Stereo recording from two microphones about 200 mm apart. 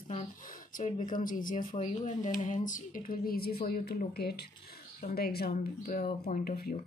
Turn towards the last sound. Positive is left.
turn(degrees=45)  # may be behind; listen again after turning